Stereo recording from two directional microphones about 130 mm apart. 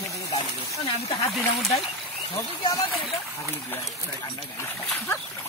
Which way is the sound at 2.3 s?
25° left (ahead or behind).